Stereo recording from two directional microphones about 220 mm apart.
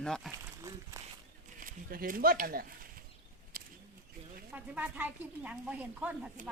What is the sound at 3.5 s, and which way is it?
Single-lens reflex camera, 40° right (ahead or behind).